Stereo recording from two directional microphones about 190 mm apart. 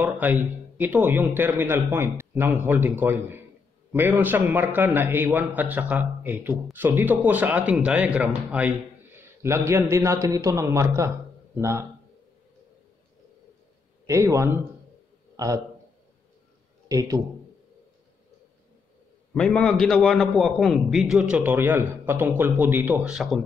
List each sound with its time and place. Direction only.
0.0 s a man's voice: 10° right (ahead or behind)
14.0 s a man's voice: 15° right (ahead or behind)
19.3 s a man's voice: 5° left (ahead or behind)